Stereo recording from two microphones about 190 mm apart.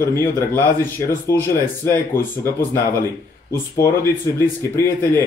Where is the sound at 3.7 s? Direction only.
15° left (ahead or behind).